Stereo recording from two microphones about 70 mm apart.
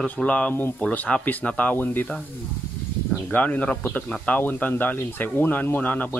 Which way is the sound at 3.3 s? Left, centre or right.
Left.